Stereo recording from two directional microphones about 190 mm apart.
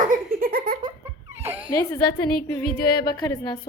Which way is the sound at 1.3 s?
10° right (ahead or behind).